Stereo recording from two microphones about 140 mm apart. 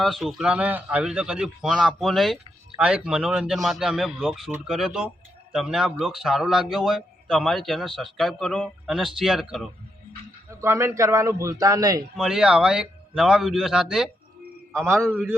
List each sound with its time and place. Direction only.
0.0 s speech: centre (ahead or behind)
10.5 s a man's voice: 20° right (ahead or behind)
12.1 s speech: 5° right (ahead or behind)